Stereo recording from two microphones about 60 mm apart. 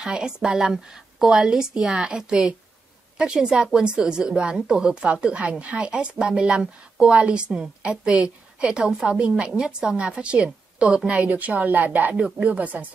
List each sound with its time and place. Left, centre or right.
0.0 s a woman's voice: centre